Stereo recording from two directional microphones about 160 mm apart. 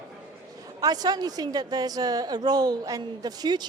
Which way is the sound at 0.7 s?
25° right (ahead or behind).